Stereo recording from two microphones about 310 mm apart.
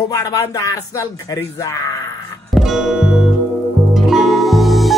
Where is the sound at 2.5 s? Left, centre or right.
Centre.